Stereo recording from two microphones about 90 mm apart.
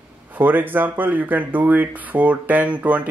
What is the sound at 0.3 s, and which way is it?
Speech, 20° right (ahead or behind).